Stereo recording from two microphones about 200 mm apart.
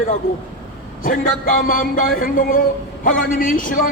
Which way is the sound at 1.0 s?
45° left (ahead or behind).